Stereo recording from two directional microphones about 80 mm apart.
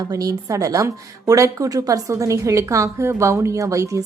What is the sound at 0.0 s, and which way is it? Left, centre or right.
A woman's voice, right.